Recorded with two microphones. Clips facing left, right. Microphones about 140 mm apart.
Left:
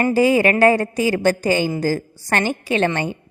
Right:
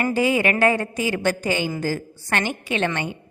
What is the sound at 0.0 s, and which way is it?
A woman's voice, 40° left (ahead or behind).